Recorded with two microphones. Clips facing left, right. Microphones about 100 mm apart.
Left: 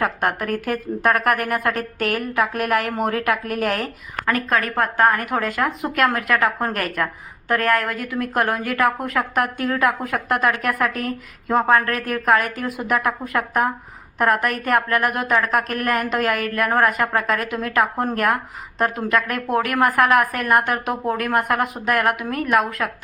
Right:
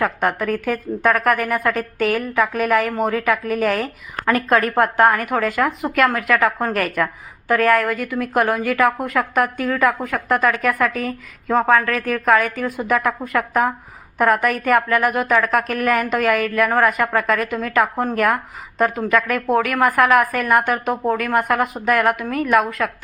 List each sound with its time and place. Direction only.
0.0 s a woman's voice: 5° left (ahead or behind)
4.4 s a woman's voice: 35° right (ahead or behind)
5.1 s a woman's voice: centre (ahead or behind)